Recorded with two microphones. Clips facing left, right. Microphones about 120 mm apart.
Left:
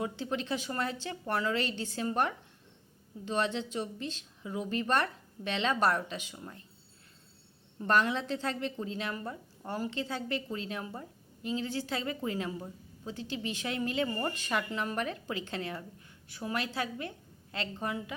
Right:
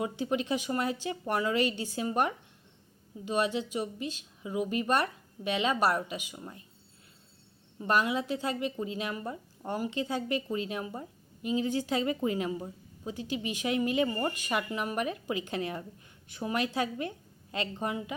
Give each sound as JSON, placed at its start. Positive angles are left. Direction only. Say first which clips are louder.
{"t": 0.0, "sound": "a woman's voice", "louder": "right 3 dB", "side_deg": -15}
{"t": 7.8, "sound": "a woman's voice", "louder": "even", "side_deg": -10}